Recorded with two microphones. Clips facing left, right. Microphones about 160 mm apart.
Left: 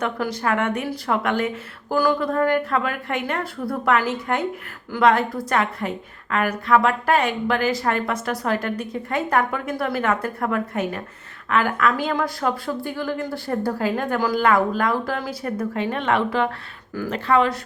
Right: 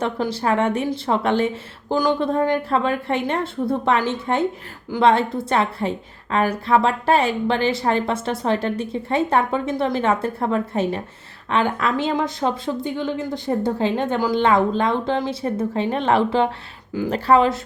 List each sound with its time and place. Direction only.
0.0 s a woman's voice: 30° right (ahead or behind)